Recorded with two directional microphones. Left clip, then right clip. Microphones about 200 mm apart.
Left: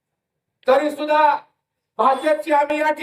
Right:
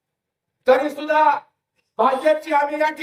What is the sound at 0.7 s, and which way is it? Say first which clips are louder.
A man's voice: even; 15° right (ahead or behind).